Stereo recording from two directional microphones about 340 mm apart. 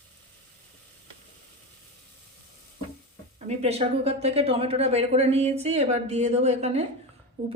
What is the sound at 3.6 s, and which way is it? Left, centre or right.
Speech, centre.